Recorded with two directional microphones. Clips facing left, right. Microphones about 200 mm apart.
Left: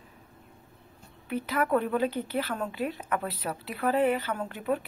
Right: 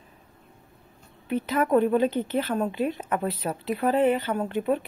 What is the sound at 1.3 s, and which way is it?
A woman's voice, 25° right (ahead or behind).